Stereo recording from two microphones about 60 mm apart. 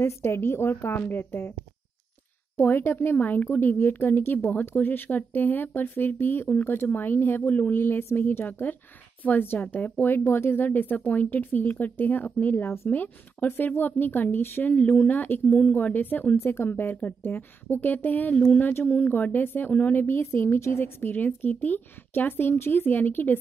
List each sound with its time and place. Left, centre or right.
0.0 s a woman's voice: left
2.5 s speech: left
4.5 s speech: left
8.0 s speech: left
9.2 s speech: left
18.3 s speech: centre
18.6 s speech: left
20.2 s a woman's voice: left
21.0 s speech: left